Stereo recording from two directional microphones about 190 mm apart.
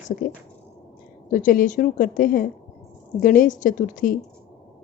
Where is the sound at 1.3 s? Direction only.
45° left (ahead or behind).